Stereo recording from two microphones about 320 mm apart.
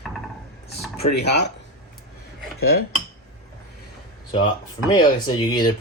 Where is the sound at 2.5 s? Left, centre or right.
Left.